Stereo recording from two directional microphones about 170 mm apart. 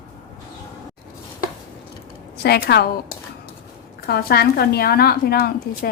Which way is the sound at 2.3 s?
70° left (ahead or behind).